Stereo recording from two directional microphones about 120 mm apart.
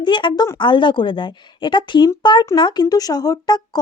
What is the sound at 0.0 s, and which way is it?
Speech, 40° left (ahead or behind).